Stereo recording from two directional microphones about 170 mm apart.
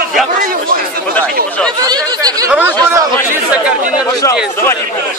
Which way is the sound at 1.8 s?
20° right (ahead or behind).